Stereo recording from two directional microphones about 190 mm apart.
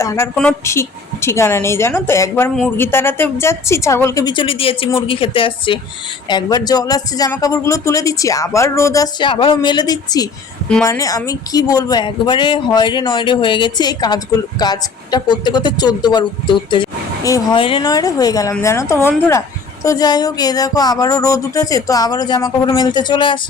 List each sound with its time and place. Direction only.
0.0 s a woman's voice: 15° left (ahead or behind)